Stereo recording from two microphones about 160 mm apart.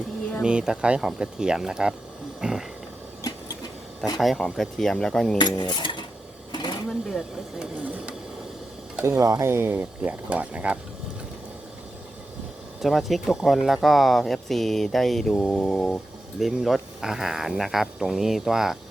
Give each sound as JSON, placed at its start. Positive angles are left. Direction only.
{"t": 0.4, "sound": "speech", "side_deg": -5}
{"t": 2.4, "sound": "a sound", "side_deg": -5}
{"t": 4.2, "sound": "speech", "side_deg": 0}
{"t": 5.4, "sound": "cutlery", "side_deg": 25}
{"t": 6.5, "sound": "sewing machine", "side_deg": 25}
{"t": 7.1, "sound": "speech", "side_deg": 0}
{"t": 9.0, "sound": "speech", "side_deg": -20}
{"t": 12.8, "sound": "speech", "side_deg": 0}